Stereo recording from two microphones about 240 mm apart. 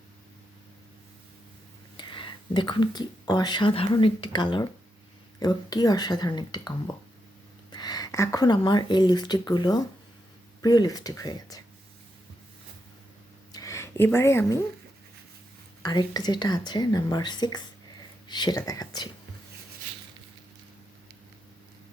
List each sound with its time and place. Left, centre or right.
2.0 s speech: centre
13.5 s a sound: centre
15.8 s speech: centre